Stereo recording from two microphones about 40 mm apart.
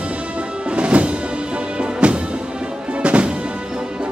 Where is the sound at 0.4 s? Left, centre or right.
Right.